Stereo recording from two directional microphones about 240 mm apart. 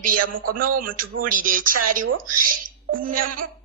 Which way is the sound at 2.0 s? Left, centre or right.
Right.